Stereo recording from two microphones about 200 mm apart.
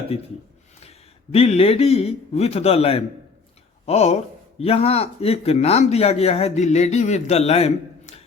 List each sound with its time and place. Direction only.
0.1 s a man's voice: 30° left (ahead or behind)